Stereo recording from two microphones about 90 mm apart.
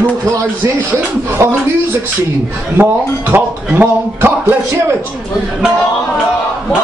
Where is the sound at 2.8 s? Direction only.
20° right (ahead or behind).